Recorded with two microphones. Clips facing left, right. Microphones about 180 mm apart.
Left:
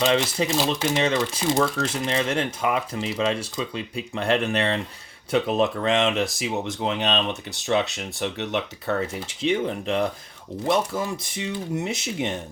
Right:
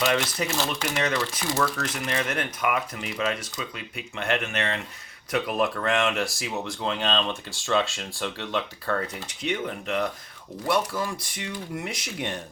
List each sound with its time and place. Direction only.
0.0 s speech: 25° left (ahead or behind)